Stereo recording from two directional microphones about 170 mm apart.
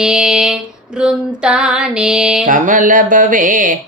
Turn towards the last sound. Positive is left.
turn(degrees=-50)  # may be behind; listen again after turning